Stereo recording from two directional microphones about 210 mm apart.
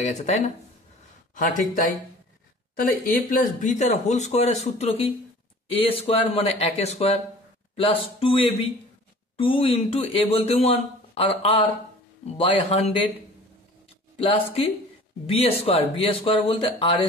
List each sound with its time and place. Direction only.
0.0 s speech: 35° left (ahead or behind)
9.4 s speech: 25° left (ahead or behind)
14.1 s speech: 30° left (ahead or behind)